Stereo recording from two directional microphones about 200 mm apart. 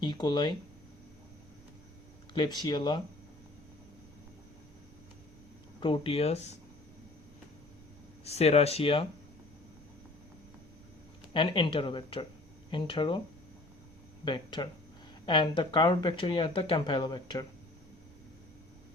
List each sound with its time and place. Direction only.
0.0 s speech: 20° left (ahead or behind)
2.3 s speech: 20° left (ahead or behind)
5.8 s speech: 25° left (ahead or behind)
8.2 s speech: 30° left (ahead or behind)
11.3 s speech: 25° left (ahead or behind)
14.3 s speech: 25° left (ahead or behind)